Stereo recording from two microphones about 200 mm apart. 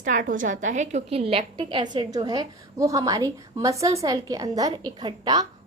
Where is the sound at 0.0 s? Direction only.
40° right (ahead or behind).